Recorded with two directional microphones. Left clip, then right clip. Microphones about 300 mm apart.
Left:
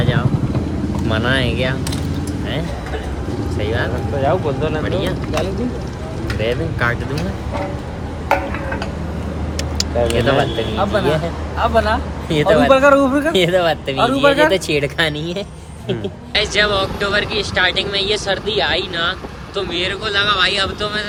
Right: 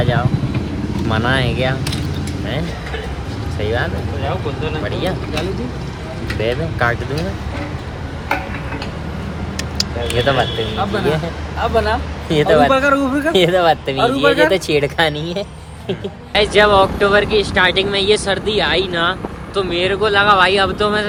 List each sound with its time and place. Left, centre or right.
0.0 s speech: centre
3.6 s speech: centre
4.3 s speech: left
6.4 s speech: centre
10.8 s speech: centre
12.8 s speech: centre
13.1 s speech: centre
16.3 s speech: centre